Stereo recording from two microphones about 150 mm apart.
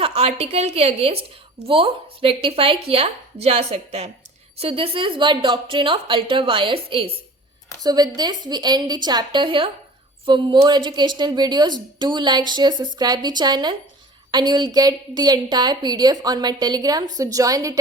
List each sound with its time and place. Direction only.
0.0 s a woman's voice: 45° right (ahead or behind); by 17.7 s 25° right (ahead or behind)